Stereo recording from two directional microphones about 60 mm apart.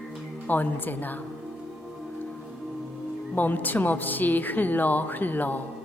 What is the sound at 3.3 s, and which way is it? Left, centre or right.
Speech, left.